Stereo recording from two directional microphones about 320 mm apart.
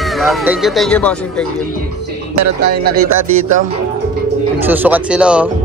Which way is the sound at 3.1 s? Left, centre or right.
Right.